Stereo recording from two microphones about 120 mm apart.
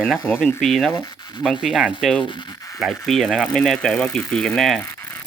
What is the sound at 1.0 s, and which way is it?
Speech, 35° left (ahead or behind).